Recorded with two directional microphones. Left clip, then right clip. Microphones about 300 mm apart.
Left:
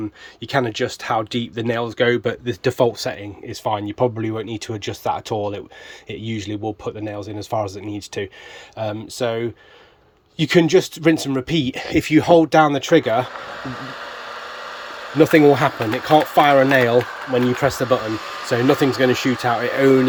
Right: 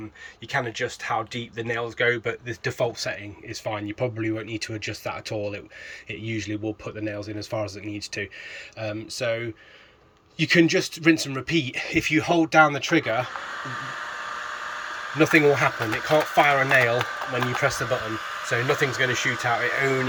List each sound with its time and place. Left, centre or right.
0.4 s speech: left
4.3 s speech: left
4.5 s speech: centre
5.4 s speech: left
6.1 s speech: centre
10.3 s speech: centre
15.2 s speech: centre